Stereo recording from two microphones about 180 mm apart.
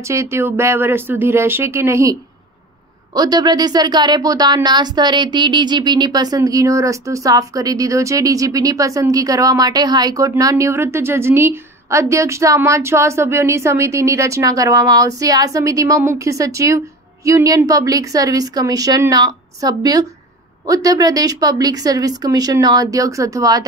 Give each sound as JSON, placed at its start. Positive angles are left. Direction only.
{"t": 0.0, "sound": "speech", "side_deg": -15}